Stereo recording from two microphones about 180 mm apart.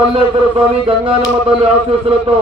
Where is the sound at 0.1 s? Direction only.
30° right (ahead or behind).